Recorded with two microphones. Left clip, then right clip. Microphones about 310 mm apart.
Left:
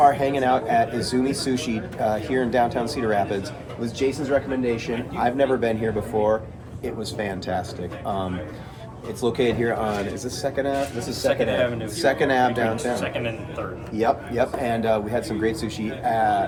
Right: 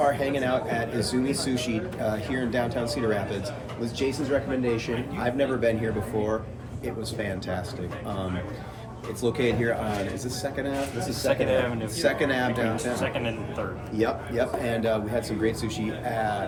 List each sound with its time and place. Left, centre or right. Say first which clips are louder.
0.0 s speech: left 6 dB; centre
9.2 s speech: left 3 dB; centre
11.3 s a man's voice: left 3 dB; centre
11.9 s speech: left 5 dB; centre
13.0 s a man's voice: left 2 dB; centre
14.0 s speech: left 5 dB; centre